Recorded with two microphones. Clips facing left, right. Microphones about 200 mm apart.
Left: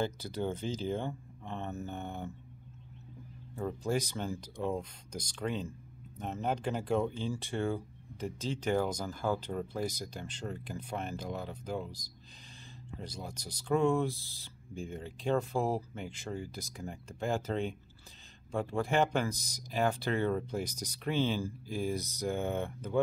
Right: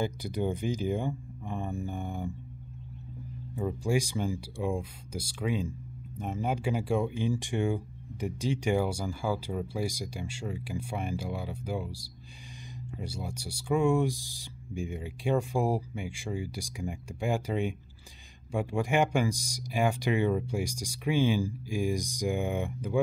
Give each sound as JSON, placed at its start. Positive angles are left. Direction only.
{"t": 0.0, "sound": "speech", "side_deg": -15}
{"t": 3.5, "sound": "speech", "side_deg": -10}